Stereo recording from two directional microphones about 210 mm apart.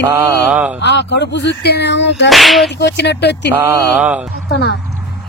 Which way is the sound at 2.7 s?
55° left (ahead or behind).